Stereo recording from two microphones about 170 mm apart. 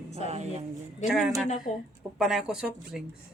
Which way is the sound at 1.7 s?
40° left (ahead or behind).